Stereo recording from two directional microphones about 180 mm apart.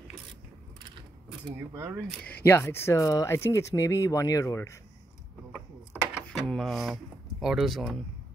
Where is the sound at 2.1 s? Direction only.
5° left (ahead or behind).